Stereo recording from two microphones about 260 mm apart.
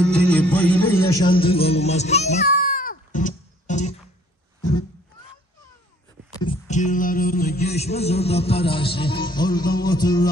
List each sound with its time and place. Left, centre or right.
0.3 s music: centre; by 3.9 s left
6.4 s music: left